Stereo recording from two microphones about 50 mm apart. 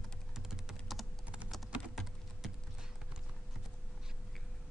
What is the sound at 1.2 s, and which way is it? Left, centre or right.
Typing, right.